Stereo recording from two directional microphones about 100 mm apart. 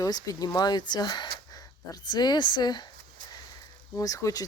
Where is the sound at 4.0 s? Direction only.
35° left (ahead or behind).